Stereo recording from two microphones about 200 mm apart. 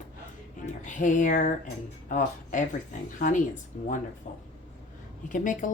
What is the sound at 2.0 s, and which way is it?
Speech, 40° left (ahead or behind).